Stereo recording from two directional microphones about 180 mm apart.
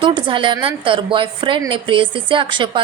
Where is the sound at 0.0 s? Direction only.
25° right (ahead or behind).